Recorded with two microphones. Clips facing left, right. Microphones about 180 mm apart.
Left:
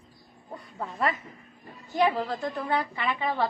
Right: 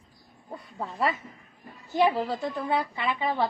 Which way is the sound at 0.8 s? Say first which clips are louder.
Right 1 dB; 5° right (ahead or behind).